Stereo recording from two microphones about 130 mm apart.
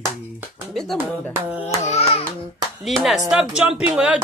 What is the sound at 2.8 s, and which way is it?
Speech, centre (ahead or behind).